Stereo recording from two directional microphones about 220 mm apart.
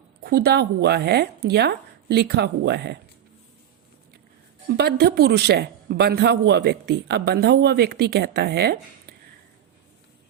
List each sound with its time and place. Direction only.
0.2 s a woman's voice: 45° right (ahead or behind)
4.8 s a woman's voice: 50° right (ahead or behind)